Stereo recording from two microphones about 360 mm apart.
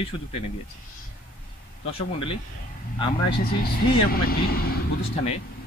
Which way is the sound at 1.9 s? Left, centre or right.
Centre.